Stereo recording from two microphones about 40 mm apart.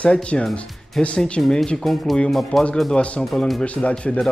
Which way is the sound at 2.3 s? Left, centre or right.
Centre.